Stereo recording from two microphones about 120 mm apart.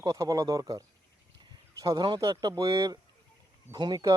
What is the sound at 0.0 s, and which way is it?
Speech, 30° right (ahead or behind).